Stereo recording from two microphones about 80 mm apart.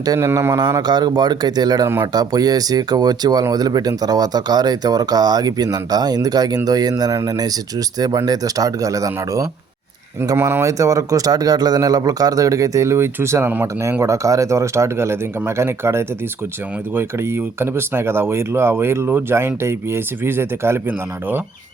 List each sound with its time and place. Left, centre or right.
0.2 s speech: right
0.5 s speech: right
10.3 s speech: right
10.6 s speech: right